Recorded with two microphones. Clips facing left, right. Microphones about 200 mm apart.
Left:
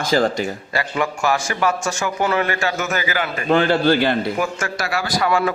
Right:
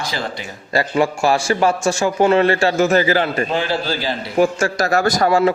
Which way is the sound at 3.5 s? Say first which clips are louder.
Left 5 dB; 60° left (ahead or behind).